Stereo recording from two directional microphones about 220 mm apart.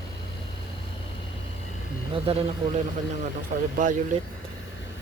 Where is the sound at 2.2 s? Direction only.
25° right (ahead or behind).